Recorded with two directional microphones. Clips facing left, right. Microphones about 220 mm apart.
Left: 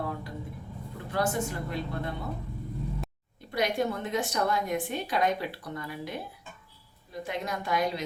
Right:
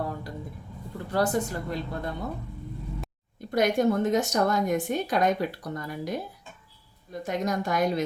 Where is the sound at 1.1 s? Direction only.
40° right (ahead or behind).